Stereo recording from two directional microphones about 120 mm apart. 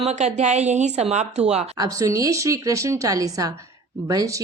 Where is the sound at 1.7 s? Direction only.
30° right (ahead or behind).